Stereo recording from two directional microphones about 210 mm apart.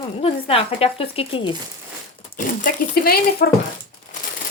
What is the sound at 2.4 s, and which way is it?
Speech, 40° left (ahead or behind).